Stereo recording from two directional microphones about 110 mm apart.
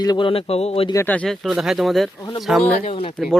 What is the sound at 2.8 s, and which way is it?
Speech, 55° left (ahead or behind).